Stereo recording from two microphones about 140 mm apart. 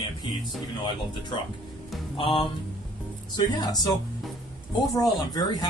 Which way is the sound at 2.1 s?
40° left (ahead or behind).